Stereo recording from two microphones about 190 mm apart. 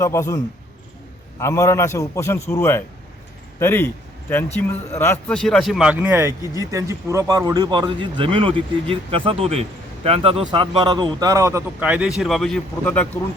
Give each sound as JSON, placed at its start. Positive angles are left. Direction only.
{"t": 0.0, "sound": "a man's voice", "side_deg": 15}